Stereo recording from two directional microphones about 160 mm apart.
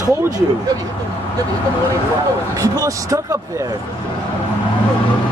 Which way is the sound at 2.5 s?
20° right (ahead or behind).